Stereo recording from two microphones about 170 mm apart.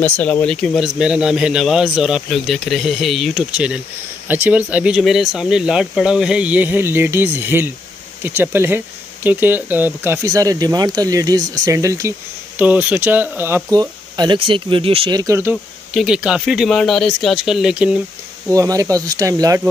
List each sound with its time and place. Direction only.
0.0 s speech: 10° left (ahead or behind); by 13.6 s 10° right (ahead or behind)
13.7 s speech: 25° right (ahead or behind)
15.5 s speech: centre (ahead or behind)
18.5 s speech: 20° right (ahead or behind)